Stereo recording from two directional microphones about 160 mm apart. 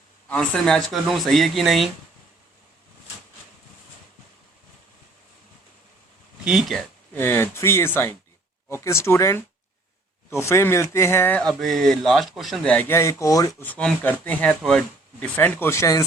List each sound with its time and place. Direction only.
0.3 s speech: 5° left (ahead or behind)
6.4 s speech: 5° right (ahead or behind)
7.1 s speech: 15° left (ahead or behind)
11.6 s speech: centre (ahead or behind); by 13.7 s 20° left (ahead or behind)
13.7 s speech: 10° left (ahead or behind)